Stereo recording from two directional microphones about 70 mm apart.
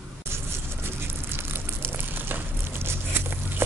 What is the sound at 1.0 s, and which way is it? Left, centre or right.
Crumpling, right.